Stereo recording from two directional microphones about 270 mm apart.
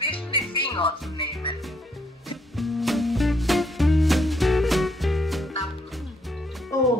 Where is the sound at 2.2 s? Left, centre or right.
Centre.